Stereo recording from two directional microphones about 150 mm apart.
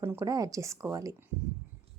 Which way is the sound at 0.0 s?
15° right (ahead or behind).